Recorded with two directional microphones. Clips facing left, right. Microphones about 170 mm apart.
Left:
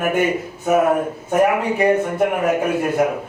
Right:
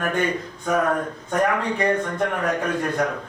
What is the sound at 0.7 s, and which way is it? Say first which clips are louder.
Speech: left 5 dB; 20° left (ahead or behind).